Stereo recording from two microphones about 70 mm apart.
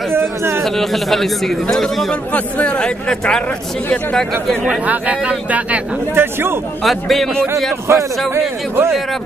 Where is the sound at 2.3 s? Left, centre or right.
Centre.